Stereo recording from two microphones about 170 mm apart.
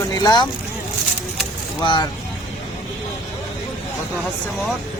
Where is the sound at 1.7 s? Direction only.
25° left (ahead or behind).